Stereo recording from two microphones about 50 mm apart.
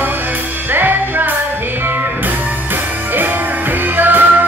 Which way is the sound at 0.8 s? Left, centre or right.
Right.